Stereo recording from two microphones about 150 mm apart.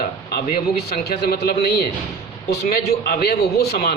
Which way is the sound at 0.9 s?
90° left.